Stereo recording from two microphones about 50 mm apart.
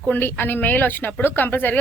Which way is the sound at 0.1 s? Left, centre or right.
Left.